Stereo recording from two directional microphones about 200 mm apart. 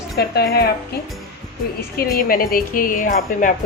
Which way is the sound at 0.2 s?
50° left (ahead or behind).